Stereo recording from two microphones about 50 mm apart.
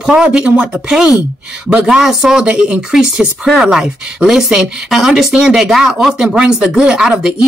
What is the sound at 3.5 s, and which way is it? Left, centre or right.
Speech, centre.